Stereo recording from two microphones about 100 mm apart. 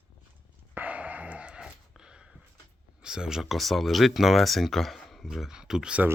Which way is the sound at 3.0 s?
5° right (ahead or behind).